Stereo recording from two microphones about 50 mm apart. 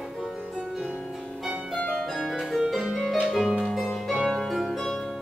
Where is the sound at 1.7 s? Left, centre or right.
Centre.